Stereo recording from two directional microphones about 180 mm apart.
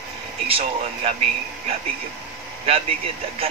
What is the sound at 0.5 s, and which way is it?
Speech, 35° right (ahead or behind).